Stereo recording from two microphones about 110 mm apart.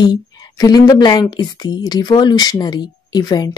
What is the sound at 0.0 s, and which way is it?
Speech, 40° left (ahead or behind).